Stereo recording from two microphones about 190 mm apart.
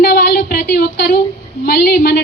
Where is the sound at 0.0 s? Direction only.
60° left (ahead or behind).